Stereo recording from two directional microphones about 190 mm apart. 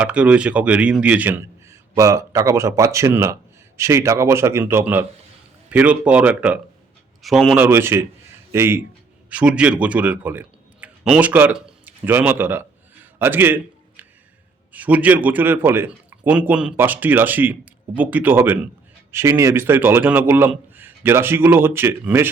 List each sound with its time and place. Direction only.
0.0 s a man's voice: 5° right (ahead or behind)
13.1 s a sound: 10° right (ahead or behind)
14.7 s a man's voice: 10° right (ahead or behind)